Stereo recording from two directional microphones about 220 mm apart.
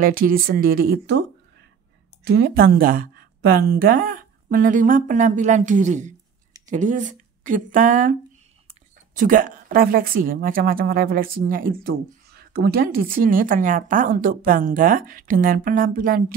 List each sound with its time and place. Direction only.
0.0 s a woman's voice: 40° right (ahead or behind)
2.2 s a woman's voice: 50° right (ahead or behind)